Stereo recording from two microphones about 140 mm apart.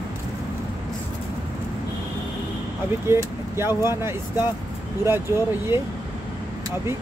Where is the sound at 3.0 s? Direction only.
20° right (ahead or behind).